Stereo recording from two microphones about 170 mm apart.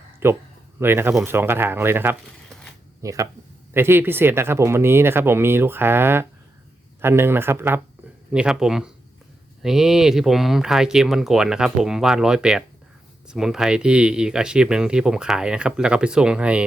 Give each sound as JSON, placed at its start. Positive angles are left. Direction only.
{"t": 0.2, "sound": "speech", "side_deg": -15}
{"t": 2.5, "sound": "a sound", "side_deg": 5}
{"t": 3.0, "sound": "speech", "side_deg": -20}